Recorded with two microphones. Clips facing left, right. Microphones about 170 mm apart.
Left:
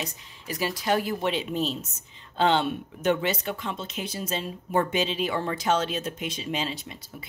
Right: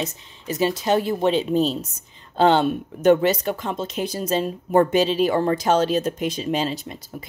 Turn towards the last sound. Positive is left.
turn(degrees=-40)  # may be behind; listen again after turning